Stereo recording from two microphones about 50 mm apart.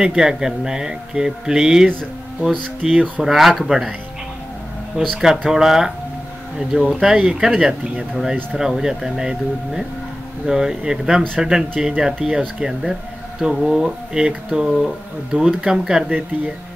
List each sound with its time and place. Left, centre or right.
0.0 s speech: centre
5.2 s speech: centre
13.8 s speech: centre
16.1 s speech: right